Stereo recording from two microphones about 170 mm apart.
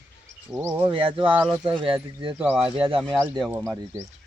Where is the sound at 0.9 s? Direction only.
30° right (ahead or behind).